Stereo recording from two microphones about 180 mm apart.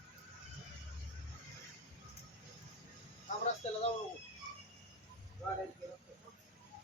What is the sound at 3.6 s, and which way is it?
Speech, 35° left (ahead or behind).